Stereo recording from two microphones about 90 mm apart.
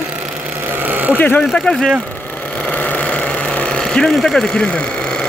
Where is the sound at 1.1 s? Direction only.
20° left (ahead or behind).